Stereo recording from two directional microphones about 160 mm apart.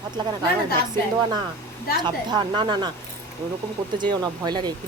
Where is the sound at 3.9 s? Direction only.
25° right (ahead or behind).